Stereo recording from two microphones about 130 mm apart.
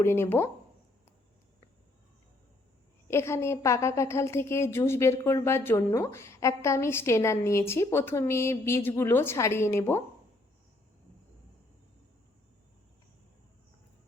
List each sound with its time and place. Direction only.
0.0 s a woman's voice: 20° left (ahead or behind)
3.1 s a woman's voice: 20° left (ahead or behind)